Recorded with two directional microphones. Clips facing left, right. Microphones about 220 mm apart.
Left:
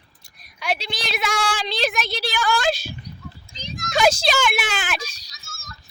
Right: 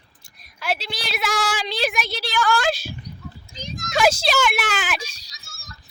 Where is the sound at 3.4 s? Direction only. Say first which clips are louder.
Right 3 dB; 50° right (ahead or behind).